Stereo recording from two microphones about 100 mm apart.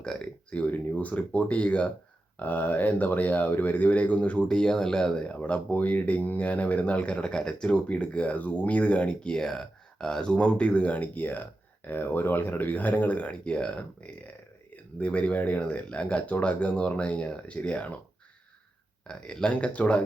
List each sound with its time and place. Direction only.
0.0 s speech: 10° left (ahead or behind)
19.0 s speech: 10° left (ahead or behind)